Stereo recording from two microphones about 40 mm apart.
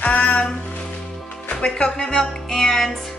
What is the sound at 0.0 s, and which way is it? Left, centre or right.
Music, left.